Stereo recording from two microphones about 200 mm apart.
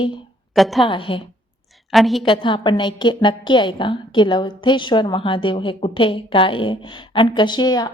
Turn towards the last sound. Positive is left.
turn(degrees=20)  # may be behind; listen again after turning